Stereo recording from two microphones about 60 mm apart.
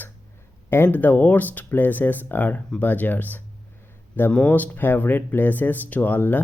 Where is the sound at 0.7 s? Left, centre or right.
Left.